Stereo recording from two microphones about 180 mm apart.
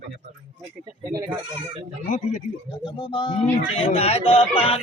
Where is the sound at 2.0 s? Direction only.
45° left (ahead or behind).